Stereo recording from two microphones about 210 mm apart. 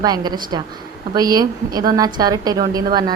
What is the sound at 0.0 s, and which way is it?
A woman's voice, 20° right (ahead or behind).